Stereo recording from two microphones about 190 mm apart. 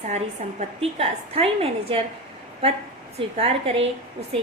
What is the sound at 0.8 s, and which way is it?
A woman's voice, 30° right (ahead or behind).